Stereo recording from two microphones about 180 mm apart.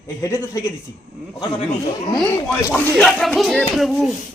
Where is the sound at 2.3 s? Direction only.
15° left (ahead or behind).